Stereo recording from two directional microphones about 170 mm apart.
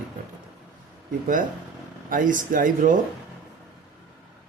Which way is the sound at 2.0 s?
50° right (ahead or behind).